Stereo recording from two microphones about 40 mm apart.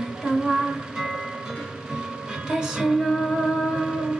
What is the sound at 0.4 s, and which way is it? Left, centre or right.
Music, centre.